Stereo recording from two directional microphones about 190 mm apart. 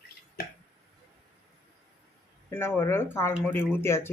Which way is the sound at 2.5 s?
10° left (ahead or behind).